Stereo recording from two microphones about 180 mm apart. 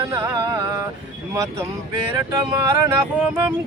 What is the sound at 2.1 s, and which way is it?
Music, 20° right (ahead or behind).